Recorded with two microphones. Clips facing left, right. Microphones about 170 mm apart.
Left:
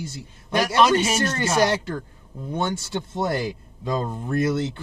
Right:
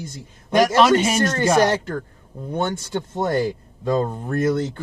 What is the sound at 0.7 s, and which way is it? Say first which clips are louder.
Speech: even; 45° right (ahead or behind).